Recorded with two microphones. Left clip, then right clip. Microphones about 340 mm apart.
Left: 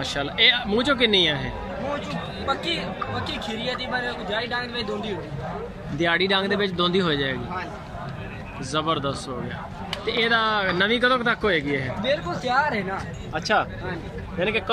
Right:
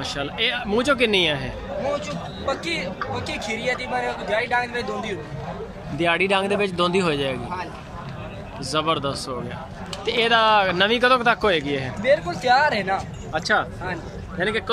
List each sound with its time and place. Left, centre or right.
0.0 s speech: centre
2.4 s a man's voice: centre
5.9 s speech: centre
8.7 s speech: centre
12.0 s speech: right
13.3 s speech: centre